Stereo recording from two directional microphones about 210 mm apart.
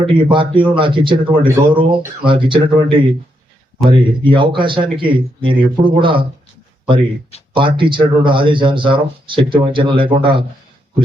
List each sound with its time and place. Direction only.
0.0 s speech: 25° right (ahead or behind)
7.5 s speech: 25° right (ahead or behind)